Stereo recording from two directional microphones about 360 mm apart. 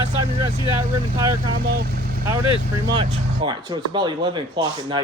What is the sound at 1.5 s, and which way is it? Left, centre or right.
Speech, right.